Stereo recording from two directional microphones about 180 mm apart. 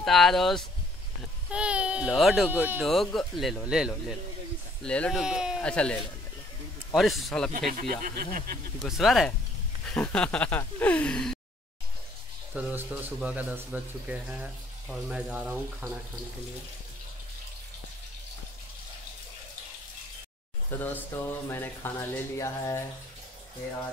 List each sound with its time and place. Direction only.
0.0 s speech: centre (ahead or behind)
7.7 s speech: 50° right (ahead or behind)
8.8 s speech: centre (ahead or behind)
9.8 s a sound: 5° left (ahead or behind)
12.5 s speech: 5° right (ahead or behind)
20.8 s a sound: 10° left (ahead or behind)